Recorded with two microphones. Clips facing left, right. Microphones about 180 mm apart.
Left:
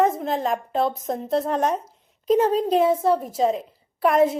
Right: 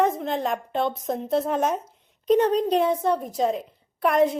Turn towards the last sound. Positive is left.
turn(degrees=0)  # may be behind; listen again after turning